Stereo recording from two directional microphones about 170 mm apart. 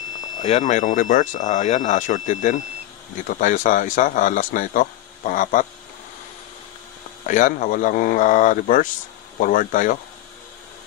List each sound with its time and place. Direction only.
0.4 s speech: 40° left (ahead or behind)
7.2 s speech: 50° left (ahead or behind)